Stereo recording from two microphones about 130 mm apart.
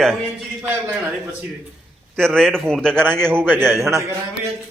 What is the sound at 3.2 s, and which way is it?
Speech, 15° right (ahead or behind).